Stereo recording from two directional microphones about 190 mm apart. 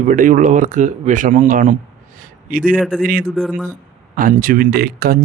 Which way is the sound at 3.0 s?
50° right (ahead or behind).